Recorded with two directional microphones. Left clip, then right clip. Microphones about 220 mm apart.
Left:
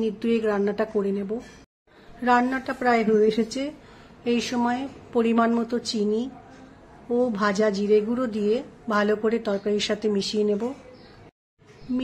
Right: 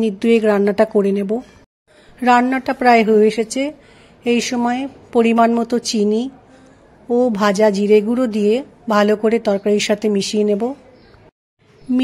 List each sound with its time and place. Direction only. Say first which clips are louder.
0.0 s a woman's voice: right 9 dB; 35° right (ahead or behind)